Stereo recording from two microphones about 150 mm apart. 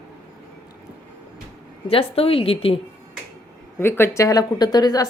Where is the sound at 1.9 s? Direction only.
40° left (ahead or behind).